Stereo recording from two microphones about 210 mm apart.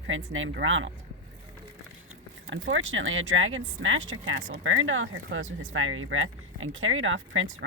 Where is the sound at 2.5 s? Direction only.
65° right (ahead or behind).